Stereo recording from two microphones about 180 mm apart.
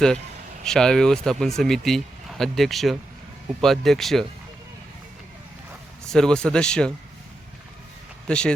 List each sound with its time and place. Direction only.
0.6 s speech: 5° left (ahead or behind)
6.1 s speech: 5° left (ahead or behind)
8.3 s speech: 5° left (ahead or behind)